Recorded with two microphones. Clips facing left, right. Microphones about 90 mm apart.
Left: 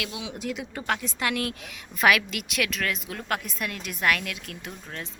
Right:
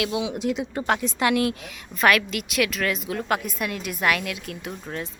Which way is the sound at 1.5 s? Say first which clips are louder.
Right 2 dB; centre (ahead or behind).